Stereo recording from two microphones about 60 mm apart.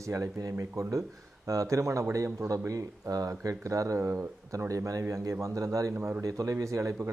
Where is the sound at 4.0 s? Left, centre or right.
Right.